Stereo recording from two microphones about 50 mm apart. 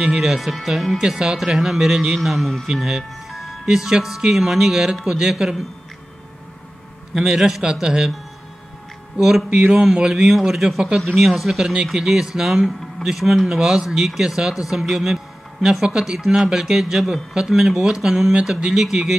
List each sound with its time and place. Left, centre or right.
0.1 s speech: centre
1.0 s speech: centre
7.2 s speech: centre
9.1 s speech: centre